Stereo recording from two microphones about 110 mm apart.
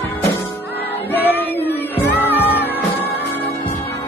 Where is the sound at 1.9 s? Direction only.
20° left (ahead or behind).